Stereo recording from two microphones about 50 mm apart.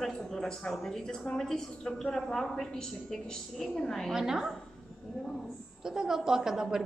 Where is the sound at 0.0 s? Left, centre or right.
Centre.